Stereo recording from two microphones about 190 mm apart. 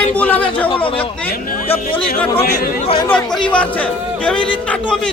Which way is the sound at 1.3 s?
50° left (ahead or behind).